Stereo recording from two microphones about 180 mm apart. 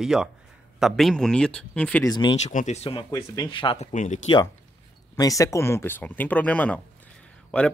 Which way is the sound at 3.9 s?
45° left (ahead or behind).